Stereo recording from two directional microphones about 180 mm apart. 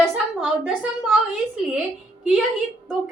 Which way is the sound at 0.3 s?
5° right (ahead or behind).